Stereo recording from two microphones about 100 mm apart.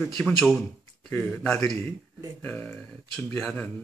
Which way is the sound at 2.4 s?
15° left (ahead or behind).